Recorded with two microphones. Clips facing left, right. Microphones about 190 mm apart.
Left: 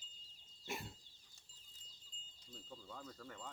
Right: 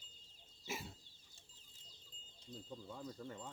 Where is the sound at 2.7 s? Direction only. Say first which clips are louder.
Right 3 dB; 15° right (ahead or behind).